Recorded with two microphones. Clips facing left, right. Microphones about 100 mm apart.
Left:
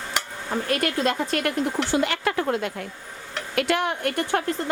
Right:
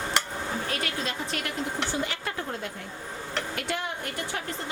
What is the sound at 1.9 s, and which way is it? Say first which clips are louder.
Speech: left 8 dB; 75° left (ahead or behind).